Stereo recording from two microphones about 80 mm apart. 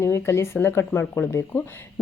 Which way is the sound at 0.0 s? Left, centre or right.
Left.